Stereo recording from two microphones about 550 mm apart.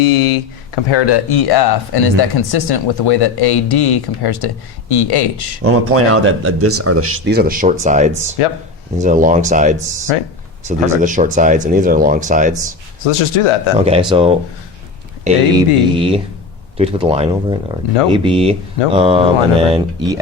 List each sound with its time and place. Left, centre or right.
0.0 s speech: left
5.6 s speech: right
10.1 s speech: left
10.7 s speech: centre
13.1 s speech: left
13.7 s speech: centre